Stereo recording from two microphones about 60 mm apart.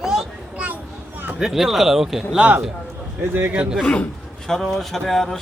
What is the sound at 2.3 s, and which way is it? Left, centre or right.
Speech, right.